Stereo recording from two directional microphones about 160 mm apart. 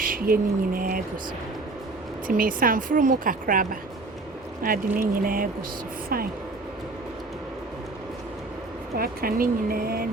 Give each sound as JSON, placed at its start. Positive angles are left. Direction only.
{"t": 0.0, "sound": "speech", "side_deg": -65}
{"t": 2.2, "sound": "speech", "side_deg": -60}
{"t": 9.0, "sound": "speech", "side_deg": -65}